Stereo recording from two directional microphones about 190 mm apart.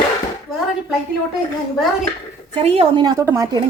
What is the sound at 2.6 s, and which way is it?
Speech, 30° right (ahead or behind).